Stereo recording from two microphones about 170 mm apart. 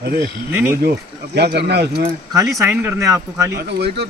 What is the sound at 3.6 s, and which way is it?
Speech, 75° right (ahead or behind).